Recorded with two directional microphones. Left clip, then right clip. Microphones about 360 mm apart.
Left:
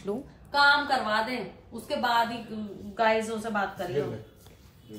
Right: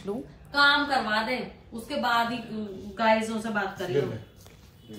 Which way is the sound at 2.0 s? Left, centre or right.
Left.